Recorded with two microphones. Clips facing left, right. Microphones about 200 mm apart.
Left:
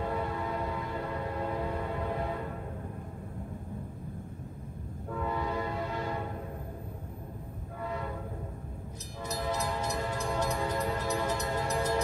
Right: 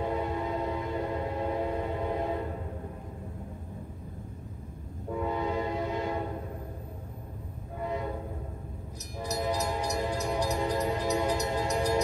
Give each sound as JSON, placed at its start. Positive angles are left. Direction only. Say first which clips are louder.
{"t": 0.0, "sound": "train", "louder": "right 3 dB", "side_deg": -20}
{"t": 5.1, "sound": "train", "louder": "right 3 dB", "side_deg": -20}
{"t": 7.8, "sound": "train", "louder": "right 4 dB", "side_deg": -20}
{"t": 9.4, "sound": "train", "louder": "right 2 dB", "side_deg": -15}